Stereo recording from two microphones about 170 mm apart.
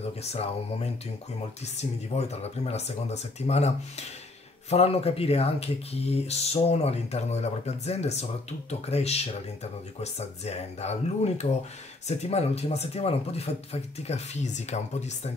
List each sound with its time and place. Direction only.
0.0 s speech: 35° left (ahead or behind)